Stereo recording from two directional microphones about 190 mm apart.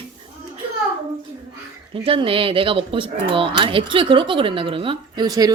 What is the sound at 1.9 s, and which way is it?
Speech, 30° right (ahead or behind).